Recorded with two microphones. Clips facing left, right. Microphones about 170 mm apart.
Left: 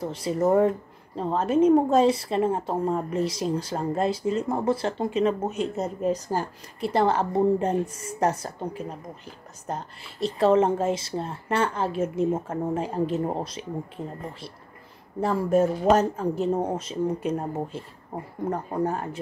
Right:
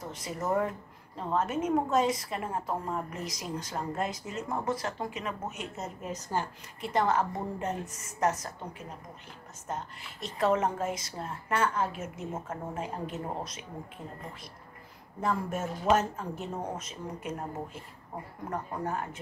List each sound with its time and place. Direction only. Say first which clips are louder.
0.0 s a woman's voice: left 11 dB; 30° left (ahead or behind)
15.1 s a woman's voice: left 10 dB; 35° left (ahead or behind)